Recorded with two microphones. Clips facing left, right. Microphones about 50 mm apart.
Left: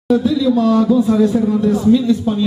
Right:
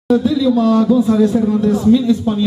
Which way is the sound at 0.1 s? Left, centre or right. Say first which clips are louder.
Right 1 dB; centre.